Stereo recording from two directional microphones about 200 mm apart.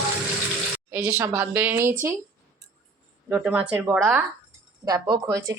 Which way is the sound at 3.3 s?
10° right (ahead or behind).